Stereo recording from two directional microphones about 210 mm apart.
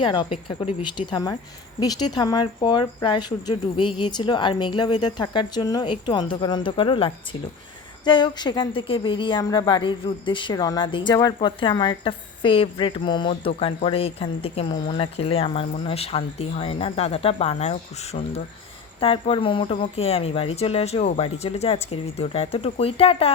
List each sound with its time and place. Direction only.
0.0 s speech: 20° left (ahead or behind)